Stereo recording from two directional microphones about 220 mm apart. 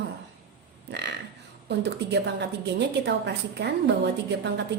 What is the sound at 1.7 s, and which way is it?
A woman's voice, 50° right (ahead or behind).